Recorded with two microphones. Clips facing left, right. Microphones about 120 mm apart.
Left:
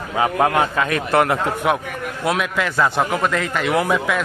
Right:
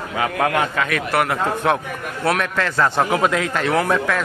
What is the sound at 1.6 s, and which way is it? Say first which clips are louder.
A man's voice: even; 5° left (ahead or behind).